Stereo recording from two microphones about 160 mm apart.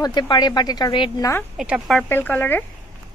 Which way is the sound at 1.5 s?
5° right (ahead or behind).